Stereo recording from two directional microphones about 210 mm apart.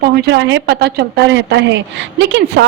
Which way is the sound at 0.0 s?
50° right (ahead or behind).